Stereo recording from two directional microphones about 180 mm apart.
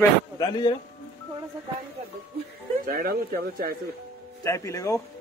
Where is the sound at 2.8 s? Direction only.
55° right (ahead or behind).